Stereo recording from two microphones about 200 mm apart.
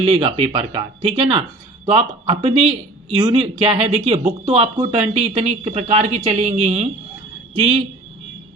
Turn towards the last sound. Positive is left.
turn(degrees=-30)  # may be behind; listen again after turning